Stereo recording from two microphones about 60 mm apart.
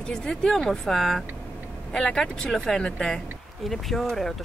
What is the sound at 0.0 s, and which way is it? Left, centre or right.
Speech, centre.